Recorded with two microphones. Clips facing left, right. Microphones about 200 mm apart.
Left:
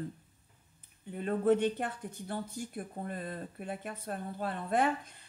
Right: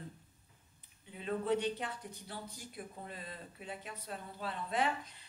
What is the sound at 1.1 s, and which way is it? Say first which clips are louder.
A woman's voice: left 6 dB; 50° left (ahead or behind).